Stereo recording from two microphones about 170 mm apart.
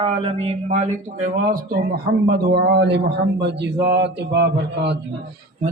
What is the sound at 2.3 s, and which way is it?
A man's voice, 70° right (ahead or behind).